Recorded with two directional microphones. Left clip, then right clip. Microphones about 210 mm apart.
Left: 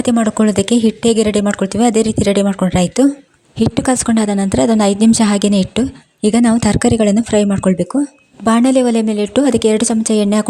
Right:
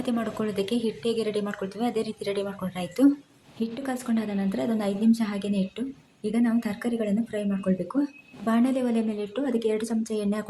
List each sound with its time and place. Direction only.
0.0 s speech: 45° left (ahead or behind)
3.6 s speech: 50° left (ahead or behind)